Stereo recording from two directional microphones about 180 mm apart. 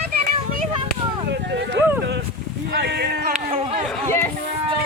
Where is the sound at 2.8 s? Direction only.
65° right (ahead or behind).